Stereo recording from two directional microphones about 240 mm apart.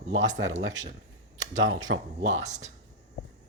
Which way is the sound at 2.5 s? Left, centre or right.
Right.